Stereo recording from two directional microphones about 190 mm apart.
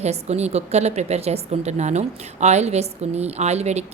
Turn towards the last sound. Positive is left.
turn(degrees=-35)  # may be behind; listen again after turning